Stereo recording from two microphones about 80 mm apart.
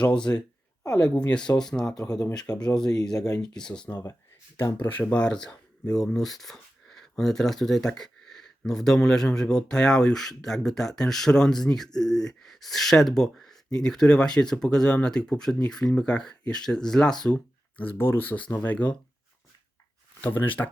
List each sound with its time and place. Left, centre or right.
0.0 s speech: centre
2.0 s speech: left
2.6 s speech: centre
4.5 s speech: left
20.2 s speech: left